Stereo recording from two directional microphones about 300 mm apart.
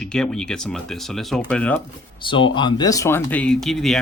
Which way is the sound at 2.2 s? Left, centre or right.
Centre.